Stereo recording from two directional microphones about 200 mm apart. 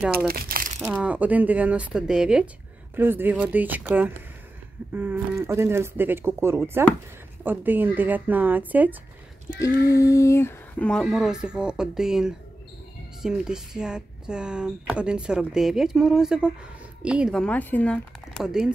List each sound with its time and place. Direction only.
0.3 s crumpling: 45° right (ahead or behind)
0.7 s speech: 5° right (ahead or behind)
9.6 s speech: 15° left (ahead or behind)
18.4 s speech: 5° right (ahead or behind)